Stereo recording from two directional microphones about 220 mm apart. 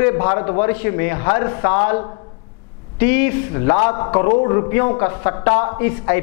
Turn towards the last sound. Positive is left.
turn(degrees=15)  # may be behind; listen again after turning